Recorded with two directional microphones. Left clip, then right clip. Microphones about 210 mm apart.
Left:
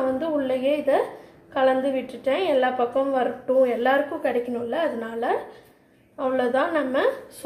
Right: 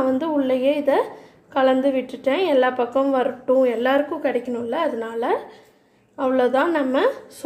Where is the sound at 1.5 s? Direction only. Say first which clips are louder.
Right 3 dB; 50° right (ahead or behind).